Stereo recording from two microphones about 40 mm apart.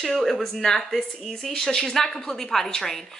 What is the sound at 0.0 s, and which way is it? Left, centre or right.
A woman's voice, centre.